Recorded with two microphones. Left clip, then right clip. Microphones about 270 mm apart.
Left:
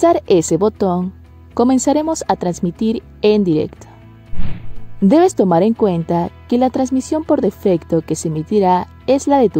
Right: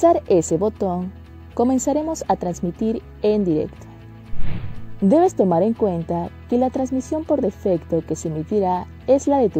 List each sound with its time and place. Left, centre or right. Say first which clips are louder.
0.0 s speech: left 3 dB; centre
5.0 s speech: left 4 dB; centre
6.9 s speech: left 5 dB; left
7.6 s speech: left 5 dB; centre